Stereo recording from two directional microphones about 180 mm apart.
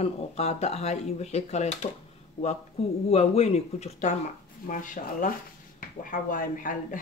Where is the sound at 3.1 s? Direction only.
35° left (ahead or behind).